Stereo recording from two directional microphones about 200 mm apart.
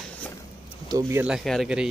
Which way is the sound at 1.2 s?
Centre (ahead or behind).